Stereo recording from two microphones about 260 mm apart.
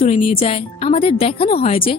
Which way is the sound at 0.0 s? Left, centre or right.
Left.